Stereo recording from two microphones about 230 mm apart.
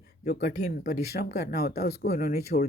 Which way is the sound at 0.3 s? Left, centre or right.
Left.